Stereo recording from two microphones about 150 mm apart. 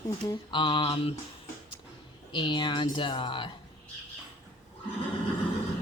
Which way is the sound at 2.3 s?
35° left (ahead or behind).